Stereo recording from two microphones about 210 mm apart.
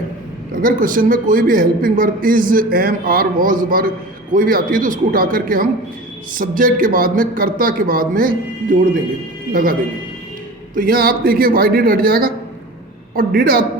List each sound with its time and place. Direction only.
0.5 s a man's voice: 40° right (ahead or behind)
10.8 s a woman's voice: 45° right (ahead or behind)